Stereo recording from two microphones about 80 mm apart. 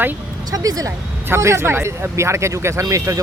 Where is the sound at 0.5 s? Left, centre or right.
Right.